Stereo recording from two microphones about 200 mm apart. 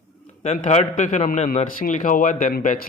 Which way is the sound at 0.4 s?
35° left (ahead or behind).